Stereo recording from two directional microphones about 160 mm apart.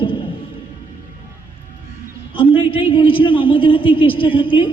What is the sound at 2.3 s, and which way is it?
A woman's voice, 30° left (ahead or behind).